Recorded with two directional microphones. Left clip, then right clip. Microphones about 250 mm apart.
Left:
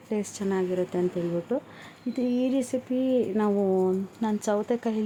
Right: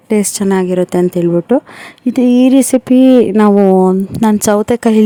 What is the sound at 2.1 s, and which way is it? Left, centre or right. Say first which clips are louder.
Speech: right 17 dB; right.